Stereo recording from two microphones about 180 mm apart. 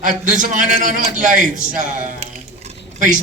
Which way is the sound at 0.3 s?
45° right (ahead or behind).